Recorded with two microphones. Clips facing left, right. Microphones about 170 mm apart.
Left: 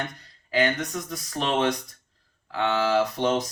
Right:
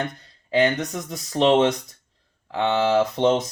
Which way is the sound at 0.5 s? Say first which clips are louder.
Right 4 dB; 25° right (ahead or behind).